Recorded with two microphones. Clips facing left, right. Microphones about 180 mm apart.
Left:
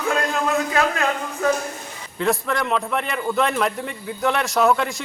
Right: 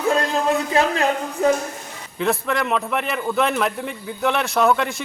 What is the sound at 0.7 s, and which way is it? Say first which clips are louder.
Speech: right 2 dB; 25° right (ahead or behind).